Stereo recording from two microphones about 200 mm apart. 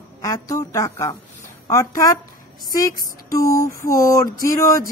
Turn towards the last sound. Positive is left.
turn(degrees=15)  # may be behind; listen again after turning